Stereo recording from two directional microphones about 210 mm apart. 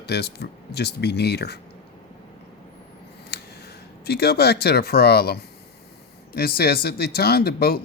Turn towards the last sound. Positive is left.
turn(degrees=45)  # may be behind; listen again after turning